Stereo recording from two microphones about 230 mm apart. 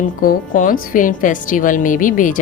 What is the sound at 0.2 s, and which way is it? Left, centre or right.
A woman's voice, left.